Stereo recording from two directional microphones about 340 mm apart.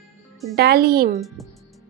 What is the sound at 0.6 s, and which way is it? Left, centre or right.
Speech, right.